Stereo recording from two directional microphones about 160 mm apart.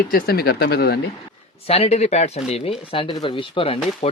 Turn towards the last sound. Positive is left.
turn(degrees=35)  # may be behind; listen again after turning